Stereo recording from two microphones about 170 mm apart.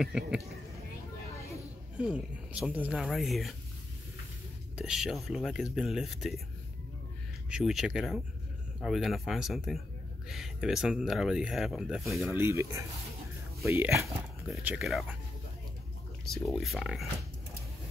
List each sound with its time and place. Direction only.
0.0 s speech: 5° right (ahead or behind)
2.0 s speech: 5° right (ahead or behind)
4.7 s speech: 5° right (ahead or behind)
7.4 s speech: 5° right (ahead or behind)
12.3 s speech: 15° right (ahead or behind)
14.5 s speech: 5° right (ahead or behind)
16.4 s speech: centre (ahead or behind)